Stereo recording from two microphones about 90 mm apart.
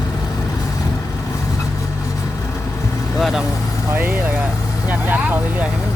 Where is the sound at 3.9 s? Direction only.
25° right (ahead or behind).